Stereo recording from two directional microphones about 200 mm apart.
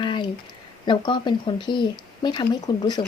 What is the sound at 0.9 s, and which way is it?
Speech, 25° left (ahead or behind).